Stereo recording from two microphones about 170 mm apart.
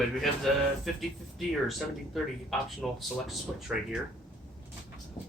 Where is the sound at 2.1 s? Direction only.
Centre (ahead or behind).